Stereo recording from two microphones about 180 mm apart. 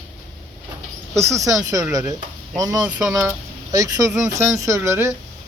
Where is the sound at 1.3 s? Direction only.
20° right (ahead or behind).